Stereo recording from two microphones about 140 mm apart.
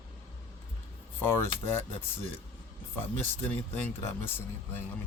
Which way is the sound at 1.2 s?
15° left (ahead or behind).